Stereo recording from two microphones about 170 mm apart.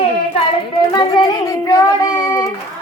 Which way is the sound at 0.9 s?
25° left (ahead or behind).